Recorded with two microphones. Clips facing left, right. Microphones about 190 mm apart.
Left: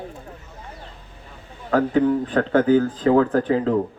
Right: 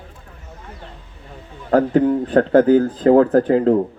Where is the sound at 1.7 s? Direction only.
40° right (ahead or behind).